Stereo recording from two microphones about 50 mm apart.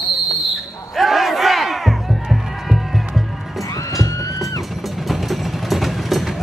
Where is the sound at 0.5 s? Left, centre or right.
Centre.